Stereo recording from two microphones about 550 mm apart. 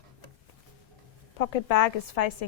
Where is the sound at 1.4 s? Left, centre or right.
Left.